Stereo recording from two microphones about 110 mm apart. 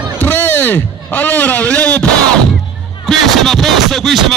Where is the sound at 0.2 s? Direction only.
15° left (ahead or behind).